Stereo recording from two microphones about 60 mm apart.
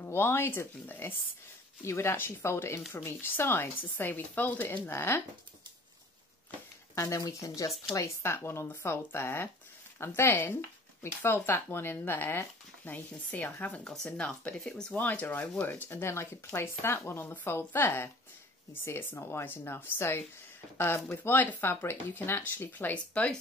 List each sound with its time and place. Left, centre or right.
0.0 s speech: left
4.8 s speech: left
7.2 s speech: left; by 15.0 s centre
15.0 s speech: left
15.9 s speech: left
22.7 s speech: left